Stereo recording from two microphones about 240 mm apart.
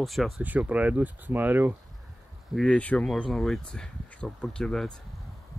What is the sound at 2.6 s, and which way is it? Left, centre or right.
Speech, centre.